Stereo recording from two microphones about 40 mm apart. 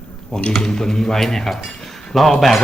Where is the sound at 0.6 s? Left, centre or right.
Centre.